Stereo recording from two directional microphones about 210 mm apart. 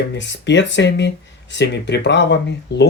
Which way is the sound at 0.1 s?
55° left (ahead or behind).